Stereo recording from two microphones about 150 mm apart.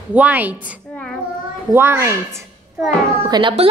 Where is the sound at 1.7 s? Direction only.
15° right (ahead or behind).